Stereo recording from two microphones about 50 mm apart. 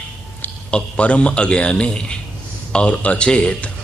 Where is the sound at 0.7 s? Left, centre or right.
Left.